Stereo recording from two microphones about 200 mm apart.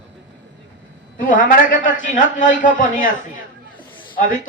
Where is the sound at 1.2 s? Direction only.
40° left (ahead or behind).